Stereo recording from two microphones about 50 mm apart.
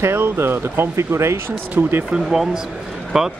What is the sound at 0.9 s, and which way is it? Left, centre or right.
Speech, right.